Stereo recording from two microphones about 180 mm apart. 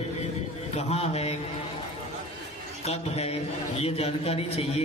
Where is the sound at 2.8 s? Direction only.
35° left (ahead or behind).